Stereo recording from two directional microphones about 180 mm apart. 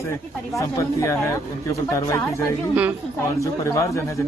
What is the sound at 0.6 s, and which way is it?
Speech, 15° left (ahead or behind).